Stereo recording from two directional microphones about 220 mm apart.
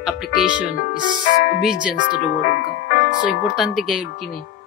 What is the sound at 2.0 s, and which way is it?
Music, 45° left (ahead or behind).